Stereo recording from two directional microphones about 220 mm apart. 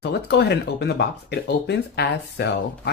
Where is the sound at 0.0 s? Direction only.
50° left (ahead or behind).